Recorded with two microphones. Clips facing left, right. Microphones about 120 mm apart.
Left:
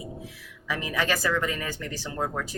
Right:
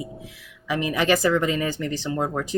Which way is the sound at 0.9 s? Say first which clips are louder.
Right 6 dB; 20° right (ahead or behind).